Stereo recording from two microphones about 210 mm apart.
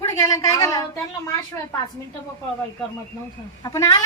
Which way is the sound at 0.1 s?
15° left (ahead or behind).